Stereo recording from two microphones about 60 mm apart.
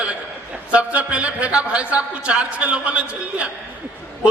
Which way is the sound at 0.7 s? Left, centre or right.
Right.